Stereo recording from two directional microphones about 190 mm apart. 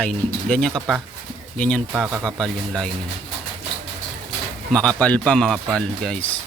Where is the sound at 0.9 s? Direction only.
5° left (ahead or behind).